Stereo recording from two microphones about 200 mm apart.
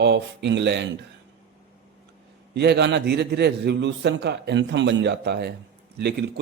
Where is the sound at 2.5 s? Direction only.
55° right (ahead or behind).